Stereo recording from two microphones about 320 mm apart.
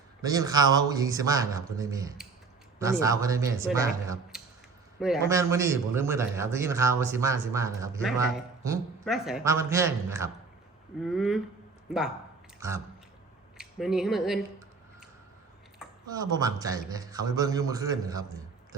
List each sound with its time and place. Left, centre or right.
0.2 s a man's voice: centre
12.5 s a sound: centre
13.6 s speech: centre
16.1 s a man's voice: centre